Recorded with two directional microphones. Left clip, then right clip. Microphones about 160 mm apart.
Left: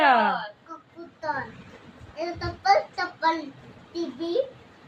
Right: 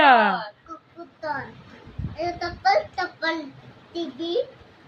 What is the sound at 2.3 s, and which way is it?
Child singing, 10° left (ahead or behind).